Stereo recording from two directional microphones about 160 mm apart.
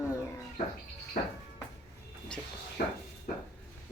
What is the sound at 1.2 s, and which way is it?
Music, 55° left (ahead or behind).